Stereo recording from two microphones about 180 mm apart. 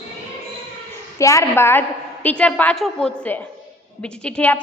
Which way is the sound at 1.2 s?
20° left (ahead or behind).